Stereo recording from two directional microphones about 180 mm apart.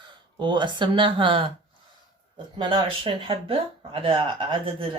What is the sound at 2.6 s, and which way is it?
Speech, 30° right (ahead or behind).